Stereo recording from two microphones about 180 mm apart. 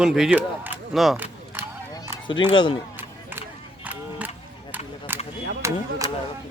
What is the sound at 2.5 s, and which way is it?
Speech, 25° left (ahead or behind).